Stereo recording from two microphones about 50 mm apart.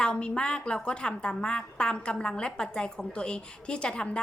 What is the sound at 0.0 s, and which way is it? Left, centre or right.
Speech, centre.